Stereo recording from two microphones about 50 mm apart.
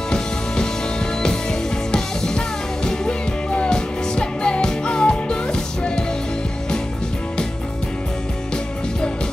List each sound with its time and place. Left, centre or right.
1.2 s music: centre